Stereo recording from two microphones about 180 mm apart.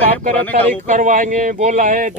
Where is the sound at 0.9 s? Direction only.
45° right (ahead or behind).